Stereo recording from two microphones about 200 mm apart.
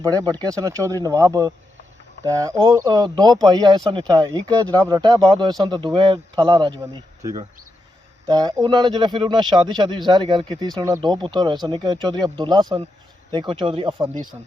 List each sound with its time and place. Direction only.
0.0 s speech: 15° right (ahead or behind)